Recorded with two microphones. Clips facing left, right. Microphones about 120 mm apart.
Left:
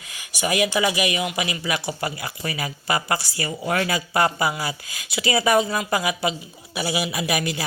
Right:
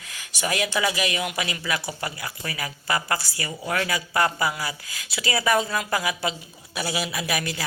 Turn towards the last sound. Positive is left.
turn(degrees=20)  # may be behind; listen again after turning